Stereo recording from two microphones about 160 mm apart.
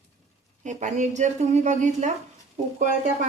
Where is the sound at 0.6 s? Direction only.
50° right (ahead or behind).